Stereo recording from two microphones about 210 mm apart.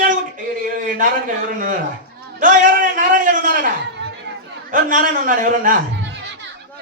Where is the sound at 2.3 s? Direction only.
40° right (ahead or behind).